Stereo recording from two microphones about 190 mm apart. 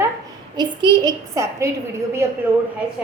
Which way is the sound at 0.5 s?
20° right (ahead or behind).